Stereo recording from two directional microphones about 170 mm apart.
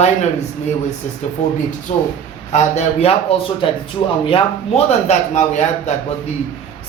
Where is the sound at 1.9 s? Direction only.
40° left (ahead or behind).